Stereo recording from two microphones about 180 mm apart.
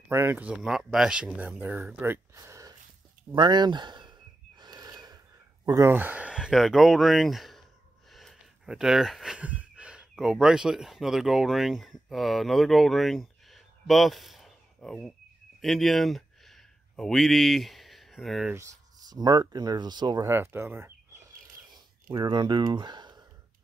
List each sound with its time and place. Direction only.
0.1 s speech: 10° right (ahead or behind)
3.3 s a sound: 25° right (ahead or behind)
5.7 s speech: 15° right (ahead or behind); by 15.1 s centre (ahead or behind)
15.6 s a sound: centre (ahead or behind)
18.5 s speech: 15° right (ahead or behind)
22.1 s speech: 25° right (ahead or behind)